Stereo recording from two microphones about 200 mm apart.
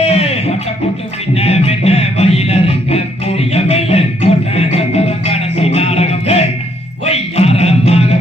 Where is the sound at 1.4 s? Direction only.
30° left (ahead or behind).